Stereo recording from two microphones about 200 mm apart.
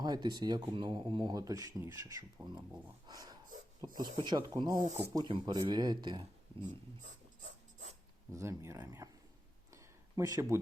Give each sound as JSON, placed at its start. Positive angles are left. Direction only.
{"t": 0.0, "sound": "speech", "side_deg": -20}
{"t": 3.1, "sound": "snort", "side_deg": -20}
{"t": 3.8, "sound": "speech", "side_deg": -20}
{"t": 4.8, "sound": "speech", "side_deg": -35}
{"t": 5.1, "sound": "speech", "side_deg": -20}
{"t": 8.3, "sound": "speech", "side_deg": -15}
{"t": 9.7, "sound": "a sound", "side_deg": -15}